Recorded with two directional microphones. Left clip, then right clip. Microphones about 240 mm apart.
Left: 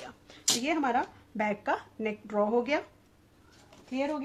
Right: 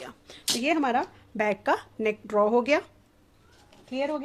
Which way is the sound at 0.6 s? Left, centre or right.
Right.